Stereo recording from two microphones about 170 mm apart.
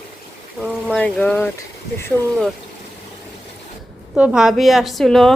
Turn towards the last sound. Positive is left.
turn(degrees=0)  # may be behind; listen again after turning